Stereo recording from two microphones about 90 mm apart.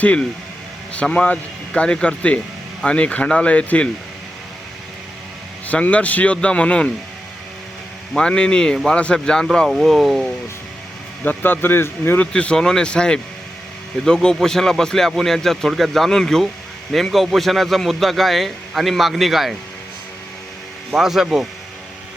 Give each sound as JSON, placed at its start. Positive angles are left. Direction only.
{"t": 0.0, "sound": "speech", "side_deg": 15}
{"t": 5.6, "sound": "speech", "side_deg": 15}
{"t": 8.1, "sound": "a man's voice", "side_deg": 10}
{"t": 11.2, "sound": "speech", "side_deg": 20}
{"t": 12.3, "sound": "a man's voice", "side_deg": 10}
{"t": 20.9, "sound": "a man's voice", "side_deg": -5}